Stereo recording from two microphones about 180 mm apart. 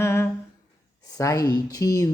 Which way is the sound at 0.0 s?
15° left (ahead or behind).